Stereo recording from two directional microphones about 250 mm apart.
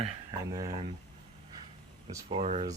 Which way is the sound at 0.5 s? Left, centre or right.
Centre.